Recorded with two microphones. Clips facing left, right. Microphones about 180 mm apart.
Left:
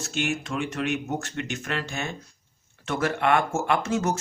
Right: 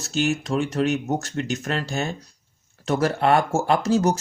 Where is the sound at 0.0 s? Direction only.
40° right (ahead or behind).